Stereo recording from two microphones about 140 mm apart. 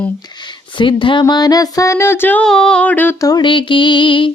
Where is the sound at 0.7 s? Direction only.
35° left (ahead or behind); by 3.3 s 15° left (ahead or behind).